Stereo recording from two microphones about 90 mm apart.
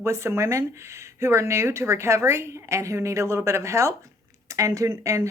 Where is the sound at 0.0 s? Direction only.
30° right (ahead or behind).